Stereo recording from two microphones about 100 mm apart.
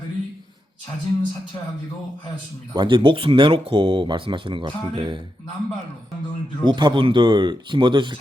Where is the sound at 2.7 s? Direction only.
55° right (ahead or behind).